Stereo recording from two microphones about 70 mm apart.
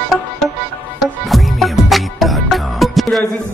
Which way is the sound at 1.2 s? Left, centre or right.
Centre.